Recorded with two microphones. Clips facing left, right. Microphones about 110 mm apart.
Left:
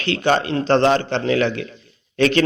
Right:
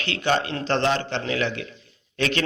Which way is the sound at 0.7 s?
45° left (ahead or behind).